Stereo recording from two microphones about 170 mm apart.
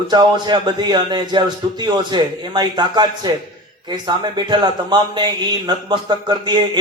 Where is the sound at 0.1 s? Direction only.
25° right (ahead or behind).